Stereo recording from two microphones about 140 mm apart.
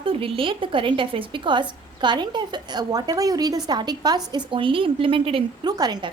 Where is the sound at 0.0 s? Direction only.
40° right (ahead or behind).